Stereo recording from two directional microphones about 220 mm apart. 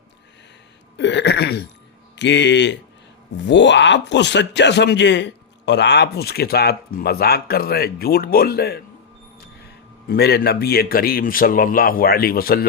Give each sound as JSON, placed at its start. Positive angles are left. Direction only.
{"t": 0.9, "sound": "a sound", "side_deg": 50}
{"t": 2.1, "sound": "speech", "side_deg": 55}
{"t": 10.1, "sound": "speech", "side_deg": 45}